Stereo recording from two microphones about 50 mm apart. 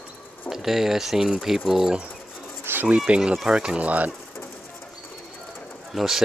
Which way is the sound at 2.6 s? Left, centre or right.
Right.